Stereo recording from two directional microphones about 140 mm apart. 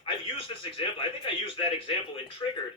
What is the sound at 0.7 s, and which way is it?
Speech, 40° left (ahead or behind).